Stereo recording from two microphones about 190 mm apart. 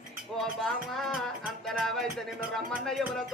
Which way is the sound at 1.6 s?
Centre (ahead or behind).